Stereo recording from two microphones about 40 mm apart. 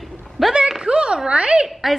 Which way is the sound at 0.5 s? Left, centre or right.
Centre.